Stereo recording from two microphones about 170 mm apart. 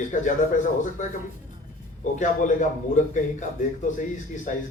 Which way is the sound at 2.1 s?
45° left (ahead or behind).